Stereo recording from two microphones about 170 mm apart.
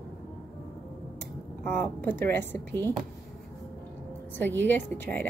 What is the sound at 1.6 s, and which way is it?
Speech, 10° left (ahead or behind).